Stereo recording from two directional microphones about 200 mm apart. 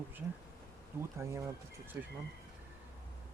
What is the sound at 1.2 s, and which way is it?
Speech, 15° right (ahead or behind).